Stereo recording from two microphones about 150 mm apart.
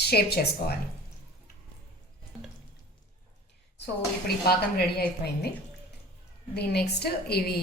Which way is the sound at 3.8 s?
90° left.